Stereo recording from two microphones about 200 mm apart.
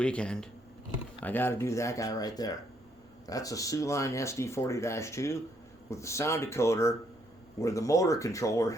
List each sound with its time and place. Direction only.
0.0 s speech: 5° left (ahead or behind)